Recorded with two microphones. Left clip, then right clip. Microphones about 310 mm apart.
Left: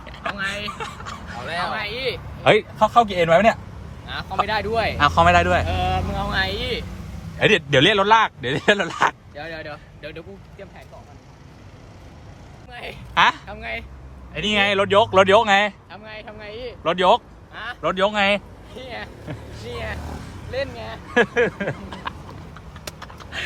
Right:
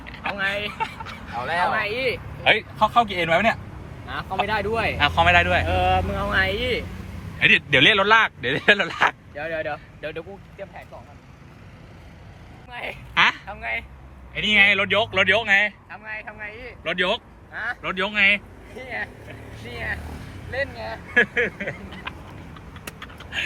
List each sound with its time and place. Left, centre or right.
0.1 s speech: centre
1.5 s speech: centre
2.0 s speech: left
2.6 s speech: centre
4.0 s a man's voice: centre
5.6 s speech: centre
7.3 s speech: centre
12.7 s a woman's voice: centre
13.1 s speech: centre
14.3 s speech: centre
20.8 s speech: centre
23.0 s vehicle: centre